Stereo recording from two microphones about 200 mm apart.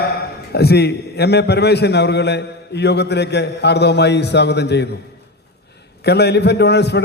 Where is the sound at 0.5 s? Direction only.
55° left (ahead or behind).